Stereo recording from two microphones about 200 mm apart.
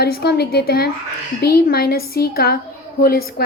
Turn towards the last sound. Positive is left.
turn(degrees=50)  # may be behind; listen again after turning